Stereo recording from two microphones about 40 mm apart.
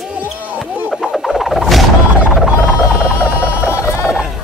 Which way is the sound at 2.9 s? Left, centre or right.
Right.